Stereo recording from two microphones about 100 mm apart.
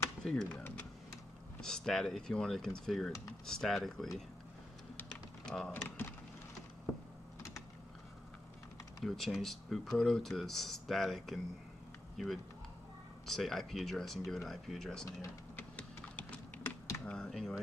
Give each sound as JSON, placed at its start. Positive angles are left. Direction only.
{"t": 0.2, "sound": "speech", "side_deg": 5}
{"t": 4.9, "sound": "typing", "side_deg": 5}
{"t": 5.9, "sound": "speech", "side_deg": 20}
{"t": 9.0, "sound": "speech", "side_deg": 0}
{"t": 15.5, "sound": "typing", "side_deg": 15}
{"t": 17.0, "sound": "speech", "side_deg": 10}